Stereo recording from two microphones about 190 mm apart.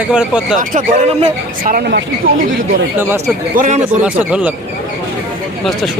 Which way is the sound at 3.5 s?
40° right (ahead or behind).